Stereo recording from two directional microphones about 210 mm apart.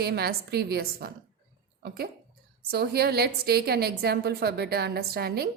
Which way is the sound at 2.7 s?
50° right (ahead or behind).